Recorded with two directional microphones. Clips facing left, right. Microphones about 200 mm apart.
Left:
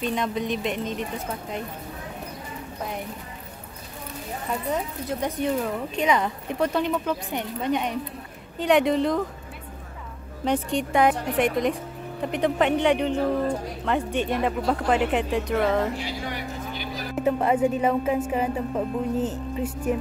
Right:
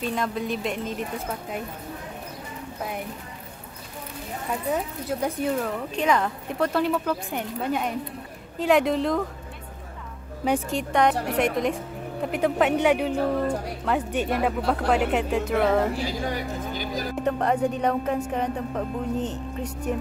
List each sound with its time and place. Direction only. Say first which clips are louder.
0.0 s speech: left 1 dB; centre (ahead or behind)
4.6 s speech: right 2 dB; 5° right (ahead or behind)
10.4 s speech: even; 5° right (ahead or behind)
16.1 s vehicle: right 3 dB; 45° right (ahead or behind)
17.2 s speech: left 3 dB; 5° left (ahead or behind)